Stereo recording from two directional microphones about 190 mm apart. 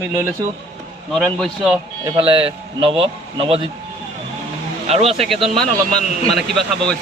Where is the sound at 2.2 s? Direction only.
25° right (ahead or behind).